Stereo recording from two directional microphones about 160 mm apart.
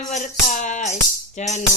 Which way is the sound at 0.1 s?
50° left (ahead or behind).